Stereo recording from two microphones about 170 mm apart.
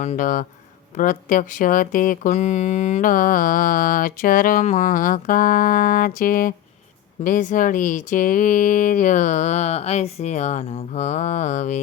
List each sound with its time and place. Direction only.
0.0 s speech: 45° left (ahead or behind)